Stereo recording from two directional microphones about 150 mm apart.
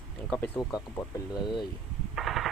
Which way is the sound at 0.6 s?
25° left (ahead or behind).